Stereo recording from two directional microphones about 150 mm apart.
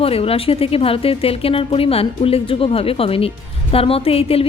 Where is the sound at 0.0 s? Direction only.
40° left (ahead or behind).